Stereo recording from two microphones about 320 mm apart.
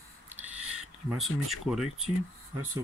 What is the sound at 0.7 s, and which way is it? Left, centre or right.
Speech, centre.